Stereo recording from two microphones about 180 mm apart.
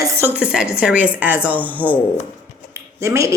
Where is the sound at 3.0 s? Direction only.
15° right (ahead or behind).